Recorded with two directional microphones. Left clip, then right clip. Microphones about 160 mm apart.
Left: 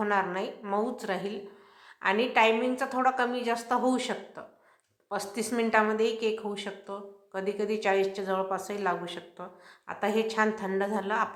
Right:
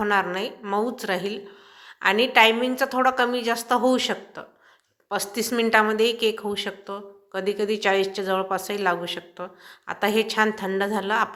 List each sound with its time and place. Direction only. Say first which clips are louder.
0.0 s a woman's voice: right 5 dB; 15° right (ahead or behind)